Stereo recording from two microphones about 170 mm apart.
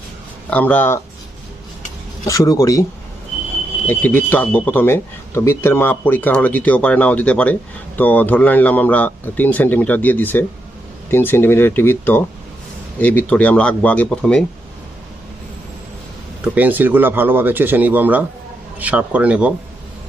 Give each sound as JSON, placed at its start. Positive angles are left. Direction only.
{"t": 0.5, "sound": "speech", "side_deg": 10}
{"t": 2.2, "sound": "speech", "side_deg": 20}
{"t": 3.8, "sound": "speech", "side_deg": 10}
{"t": 16.6, "sound": "speech", "side_deg": -10}